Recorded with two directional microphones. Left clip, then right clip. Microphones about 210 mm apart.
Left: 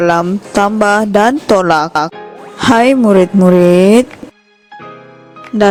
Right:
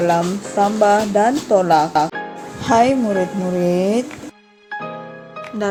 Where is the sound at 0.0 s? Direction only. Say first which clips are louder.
Left 5 dB; 55° left (ahead or behind).